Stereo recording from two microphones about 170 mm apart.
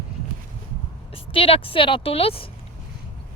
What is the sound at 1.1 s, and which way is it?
Speech, 35° left (ahead or behind).